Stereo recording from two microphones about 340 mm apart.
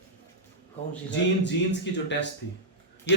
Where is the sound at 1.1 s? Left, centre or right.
Left.